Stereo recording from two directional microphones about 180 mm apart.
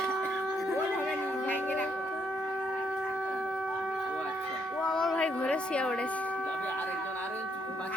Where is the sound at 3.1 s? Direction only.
5° right (ahead or behind).